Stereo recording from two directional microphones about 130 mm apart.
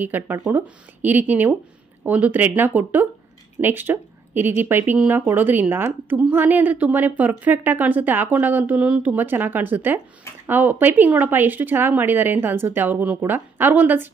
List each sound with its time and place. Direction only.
0.0 s speech: 15° right (ahead or behind)